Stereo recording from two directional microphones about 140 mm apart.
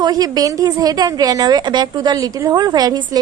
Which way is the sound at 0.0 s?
30° right (ahead or behind).